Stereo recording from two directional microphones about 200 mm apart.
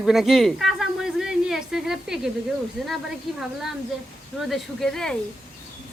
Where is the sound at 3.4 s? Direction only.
Centre (ahead or behind).